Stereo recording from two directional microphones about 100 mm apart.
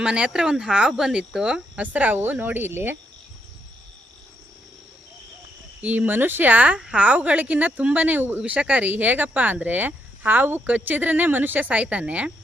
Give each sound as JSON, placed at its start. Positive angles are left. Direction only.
{"t": 0.0, "sound": "speech", "side_deg": -10}
{"t": 5.8, "sound": "speech", "side_deg": -15}